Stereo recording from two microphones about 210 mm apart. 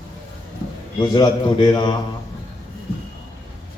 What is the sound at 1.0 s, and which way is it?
Speech, 20° left (ahead or behind).